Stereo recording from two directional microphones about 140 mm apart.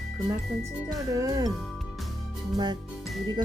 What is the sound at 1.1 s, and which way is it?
Speech, 25° right (ahead or behind).